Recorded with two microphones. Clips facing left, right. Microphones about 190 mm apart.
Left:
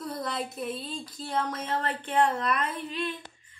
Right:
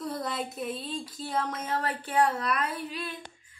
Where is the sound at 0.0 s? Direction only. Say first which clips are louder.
Even; centre (ahead or behind).